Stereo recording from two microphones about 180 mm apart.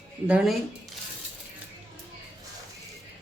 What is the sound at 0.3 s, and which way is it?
Speech, 5° right (ahead or behind).